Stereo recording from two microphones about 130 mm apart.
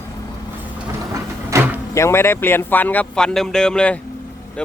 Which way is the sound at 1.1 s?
20° right (ahead or behind).